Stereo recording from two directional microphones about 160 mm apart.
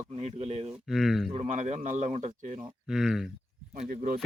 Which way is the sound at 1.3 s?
45° right (ahead or behind).